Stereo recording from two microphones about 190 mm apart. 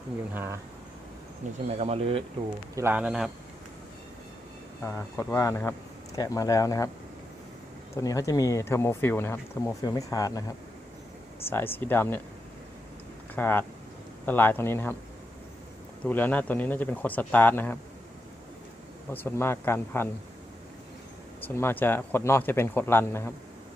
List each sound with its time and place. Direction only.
0.3 s speech: 10° right (ahead or behind)
1.4 s speech: 40° right (ahead or behind)
2.7 s a man's voice: 10° right (ahead or behind)
4.8 s speech: 15° left (ahead or behind)
7.9 s speech: 15° left (ahead or behind)
11.4 s speech: 10° left (ahead or behind)
13.3 s speech: 10° left (ahead or behind)
16.0 s speech: 10° left (ahead or behind)
19.1 s speech: 10° left (ahead or behind)
21.4 s speech: 10° left (ahead or behind)